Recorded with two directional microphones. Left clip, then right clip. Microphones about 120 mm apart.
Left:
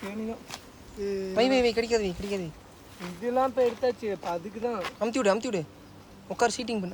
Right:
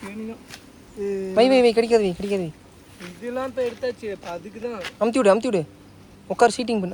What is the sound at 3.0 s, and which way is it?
Speech, 90° left.